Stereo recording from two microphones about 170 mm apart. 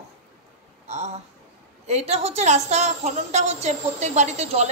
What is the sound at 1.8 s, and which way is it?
A woman's voice, 40° right (ahead or behind).